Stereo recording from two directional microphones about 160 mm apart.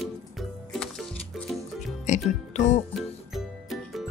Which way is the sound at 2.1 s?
50° left (ahead or behind).